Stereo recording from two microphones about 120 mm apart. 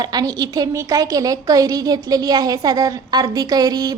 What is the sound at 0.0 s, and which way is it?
A woman's voice, 35° right (ahead or behind).